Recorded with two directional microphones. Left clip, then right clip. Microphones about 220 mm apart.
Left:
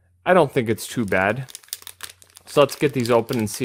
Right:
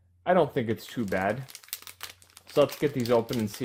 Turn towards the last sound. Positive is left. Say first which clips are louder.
# left 6 dB
turn(degrees=50)  # may be behind; listen again after turning